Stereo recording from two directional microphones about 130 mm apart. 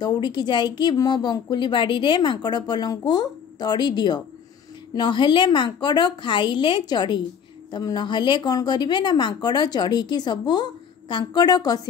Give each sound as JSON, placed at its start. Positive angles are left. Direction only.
{"t": 0.0, "sound": "speech", "side_deg": 35}